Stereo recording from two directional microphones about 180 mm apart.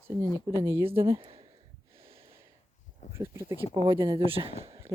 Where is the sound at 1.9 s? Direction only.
30° right (ahead or behind).